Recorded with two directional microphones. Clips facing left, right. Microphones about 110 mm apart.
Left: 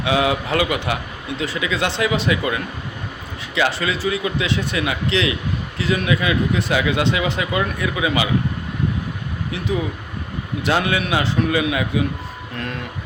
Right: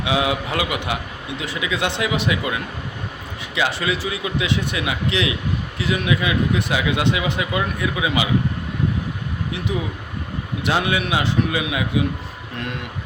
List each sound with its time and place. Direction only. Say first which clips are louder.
0.0 s speech: left 2 dB; 15° right (ahead or behind)
10.6 s speech: left 1 dB; 15° right (ahead or behind)